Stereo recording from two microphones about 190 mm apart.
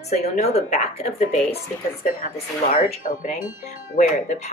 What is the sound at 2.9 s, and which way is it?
Speech, 40° left (ahead or behind).